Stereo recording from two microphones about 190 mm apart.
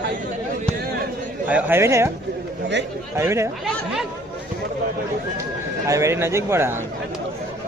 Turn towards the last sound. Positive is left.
turn(degrees=-15)  # may be behind; listen again after turning